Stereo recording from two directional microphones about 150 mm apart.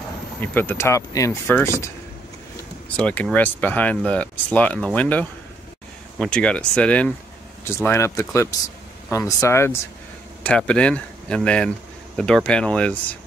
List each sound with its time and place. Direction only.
0.4 s speech: 15° left (ahead or behind)
3.0 s speech: 5° left (ahead or behind)
10.4 s speech: 5° left (ahead or behind)